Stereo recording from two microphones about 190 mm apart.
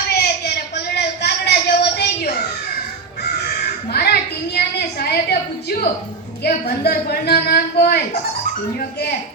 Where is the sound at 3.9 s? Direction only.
55° left (ahead or behind).